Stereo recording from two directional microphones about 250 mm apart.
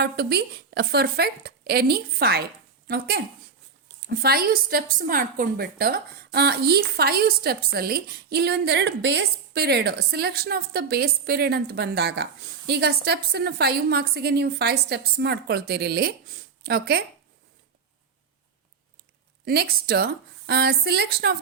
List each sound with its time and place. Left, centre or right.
0.0 s a woman's voice: right
19.5 s a woman's voice: right